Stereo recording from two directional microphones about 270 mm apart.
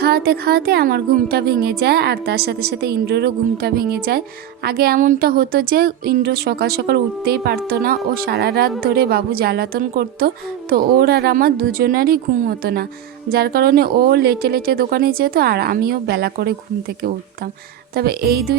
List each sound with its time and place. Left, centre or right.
0.0 s a woman's voice: right